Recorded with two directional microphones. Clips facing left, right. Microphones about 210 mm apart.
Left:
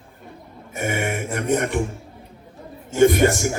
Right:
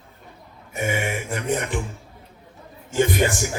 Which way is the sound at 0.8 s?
50° left (ahead or behind).